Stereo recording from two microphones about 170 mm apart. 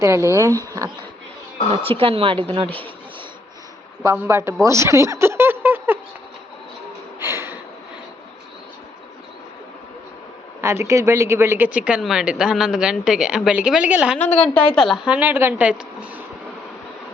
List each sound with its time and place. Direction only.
0.0 s speech: 15° right (ahead or behind)
1.7 s speech: 35° right (ahead or behind)
4.0 s speech: 15° right (ahead or behind)
4.6 s a sound: 15° right (ahead or behind)
7.2 s a sound: 15° right (ahead or behind)
10.6 s speech: 15° right (ahead or behind)
14.3 s speech: 10° left (ahead or behind); by 16.2 s 10° right (ahead or behind)